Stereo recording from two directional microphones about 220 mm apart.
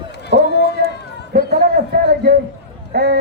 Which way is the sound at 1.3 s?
45° right (ahead or behind).